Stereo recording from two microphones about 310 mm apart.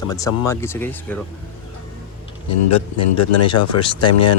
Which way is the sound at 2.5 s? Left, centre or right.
Left.